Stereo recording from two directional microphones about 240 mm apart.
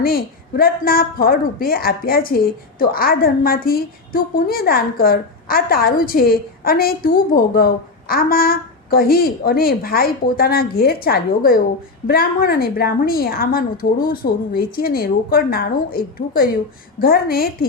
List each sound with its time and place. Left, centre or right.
0.0 s a woman's voice: left